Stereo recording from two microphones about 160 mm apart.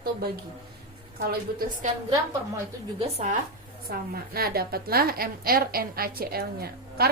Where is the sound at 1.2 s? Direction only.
65° right (ahead or behind).